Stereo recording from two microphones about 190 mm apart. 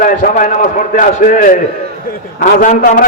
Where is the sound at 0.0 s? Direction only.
45° left (ahead or behind).